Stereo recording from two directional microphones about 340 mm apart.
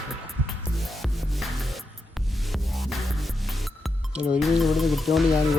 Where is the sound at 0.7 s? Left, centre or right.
Centre.